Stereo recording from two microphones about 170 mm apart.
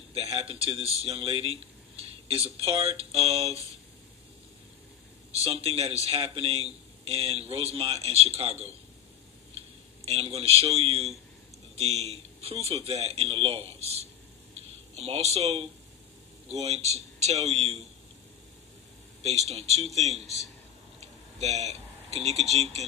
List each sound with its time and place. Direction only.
0.1 s speech: 35° right (ahead or behind)
5.3 s speech: 35° right (ahead or behind)
10.0 s speech: 35° right (ahead or behind)
19.2 s speech: 40° right (ahead or behind)